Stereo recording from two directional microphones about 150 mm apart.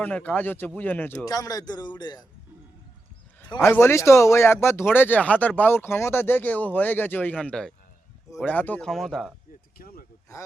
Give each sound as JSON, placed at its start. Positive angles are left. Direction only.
{"t": 0.0, "sound": "speech", "side_deg": 10}
{"t": 1.2, "sound": "a man's voice", "side_deg": 25}
{"t": 3.6, "sound": "speech", "side_deg": 15}
{"t": 9.7, "sound": "speech", "side_deg": 75}